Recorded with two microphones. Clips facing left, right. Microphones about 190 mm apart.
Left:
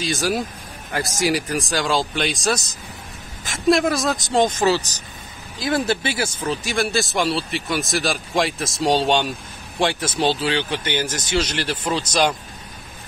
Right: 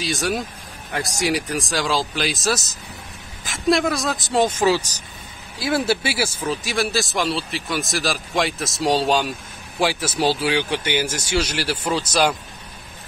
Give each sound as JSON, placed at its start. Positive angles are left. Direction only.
{"t": 0.0, "sound": "speech", "side_deg": 0}